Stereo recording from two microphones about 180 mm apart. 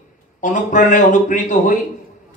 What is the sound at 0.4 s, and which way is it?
Speech, 45° left (ahead or behind).